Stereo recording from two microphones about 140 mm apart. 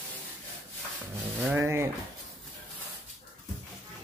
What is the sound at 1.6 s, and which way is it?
Speech, 15° right (ahead or behind).